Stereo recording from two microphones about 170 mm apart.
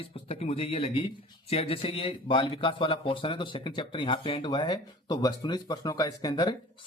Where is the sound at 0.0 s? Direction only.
35° left (ahead or behind).